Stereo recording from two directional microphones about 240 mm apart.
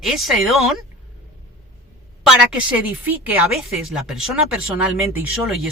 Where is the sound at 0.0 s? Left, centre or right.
Centre.